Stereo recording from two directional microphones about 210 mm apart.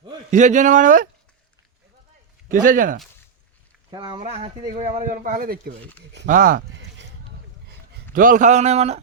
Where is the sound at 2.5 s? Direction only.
40° right (ahead or behind).